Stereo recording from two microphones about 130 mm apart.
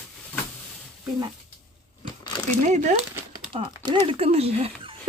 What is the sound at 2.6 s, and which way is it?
Speech, 65° right (ahead or behind).